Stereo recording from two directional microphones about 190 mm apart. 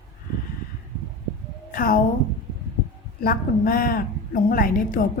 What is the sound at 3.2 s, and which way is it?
A woman's voice, 50° left (ahead or behind).